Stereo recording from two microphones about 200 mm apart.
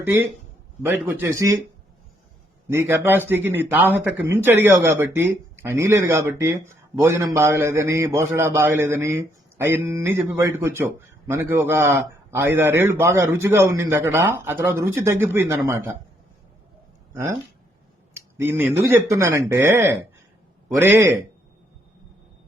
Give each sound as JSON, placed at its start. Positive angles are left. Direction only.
{"t": 0.0, "sound": "a man's voice", "side_deg": -10}
{"t": 2.6, "sound": "a man's voice", "side_deg": -10}
{"t": 18.1, "sound": "a man's voice", "side_deg": -10}